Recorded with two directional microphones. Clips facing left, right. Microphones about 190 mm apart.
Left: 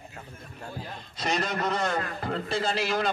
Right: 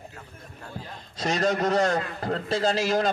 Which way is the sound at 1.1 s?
40° right (ahead or behind).